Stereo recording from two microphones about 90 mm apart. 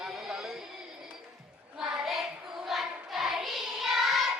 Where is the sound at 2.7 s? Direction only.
5° right (ahead or behind).